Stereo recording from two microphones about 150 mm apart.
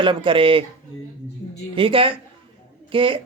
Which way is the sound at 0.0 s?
35° right (ahead or behind).